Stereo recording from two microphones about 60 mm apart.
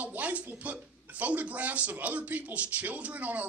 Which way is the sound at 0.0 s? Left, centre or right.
Right.